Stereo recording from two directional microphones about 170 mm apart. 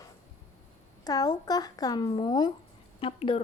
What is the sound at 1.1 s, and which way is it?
Speech, 20° left (ahead or behind).